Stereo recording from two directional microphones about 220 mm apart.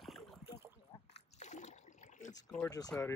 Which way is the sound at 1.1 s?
30° left (ahead or behind).